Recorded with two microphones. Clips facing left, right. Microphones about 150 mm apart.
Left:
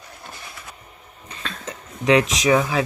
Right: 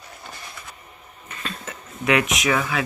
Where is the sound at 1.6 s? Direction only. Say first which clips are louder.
Left 4 dB; 30° left (ahead or behind).